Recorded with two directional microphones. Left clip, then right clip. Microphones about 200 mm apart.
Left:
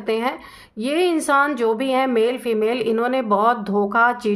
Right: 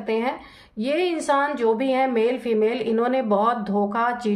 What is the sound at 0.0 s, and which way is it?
Speech, 40° left (ahead or behind).